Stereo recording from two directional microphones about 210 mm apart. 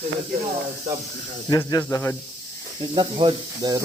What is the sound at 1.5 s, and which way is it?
Speech, 15° left (ahead or behind).